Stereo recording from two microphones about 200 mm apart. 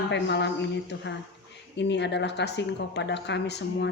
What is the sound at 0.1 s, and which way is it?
Speech, 60° left (ahead or behind).